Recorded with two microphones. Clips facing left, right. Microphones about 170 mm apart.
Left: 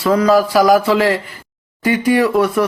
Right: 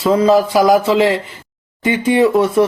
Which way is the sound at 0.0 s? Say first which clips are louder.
Right 1 dB; 25° right (ahead or behind).